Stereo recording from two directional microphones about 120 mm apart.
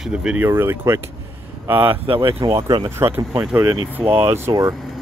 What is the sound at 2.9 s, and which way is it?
Speech, 20° right (ahead or behind).